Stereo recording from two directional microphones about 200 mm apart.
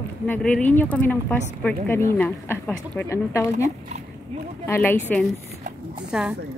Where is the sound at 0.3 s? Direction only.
5° left (ahead or behind).